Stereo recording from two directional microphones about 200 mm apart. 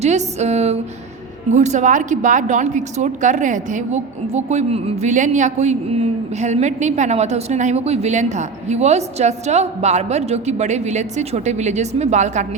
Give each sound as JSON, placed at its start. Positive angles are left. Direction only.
{"t": 0.0, "sound": "a woman's voice", "side_deg": -35}